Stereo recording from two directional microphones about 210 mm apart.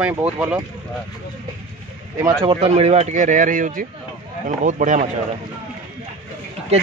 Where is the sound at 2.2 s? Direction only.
20° right (ahead or behind).